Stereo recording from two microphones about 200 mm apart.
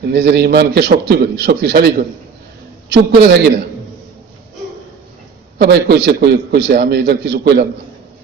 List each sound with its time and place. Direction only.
0.0 s a man's voice: 55° right (ahead or behind)
5.5 s a man's voice: 55° right (ahead or behind)